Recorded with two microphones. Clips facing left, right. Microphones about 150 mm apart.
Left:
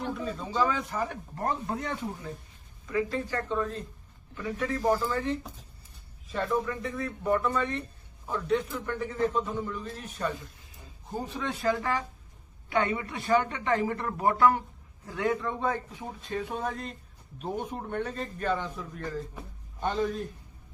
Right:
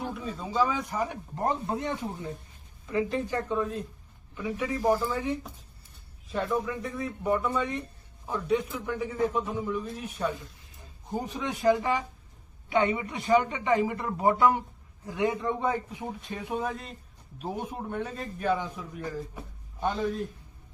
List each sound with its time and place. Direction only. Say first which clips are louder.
0.0 s a man's voice: left 1 dB; 5° right (ahead or behind)